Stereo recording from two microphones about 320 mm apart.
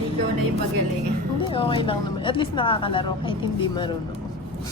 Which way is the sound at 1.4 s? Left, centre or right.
Centre.